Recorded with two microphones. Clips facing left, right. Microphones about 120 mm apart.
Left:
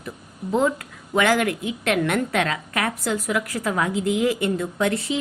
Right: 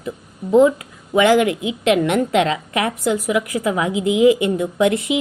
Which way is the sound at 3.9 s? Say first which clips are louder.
Right 4 dB; 70° right (ahead or behind).